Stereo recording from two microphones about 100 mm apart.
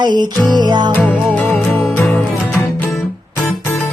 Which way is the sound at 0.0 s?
45° right (ahead or behind).